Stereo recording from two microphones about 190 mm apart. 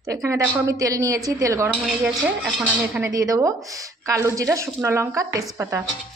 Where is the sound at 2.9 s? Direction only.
20° right (ahead or behind).